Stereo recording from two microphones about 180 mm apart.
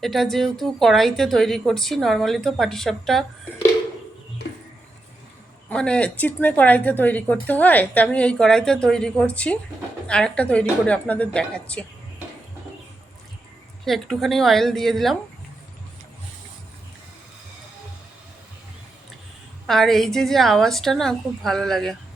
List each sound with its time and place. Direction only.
0.0 s a woman's voice: centre (ahead or behind)
5.6 s a woman's voice: 5° left (ahead or behind)
13.8 s a woman's voice: centre (ahead or behind)
19.6 s a woman's voice: centre (ahead or behind)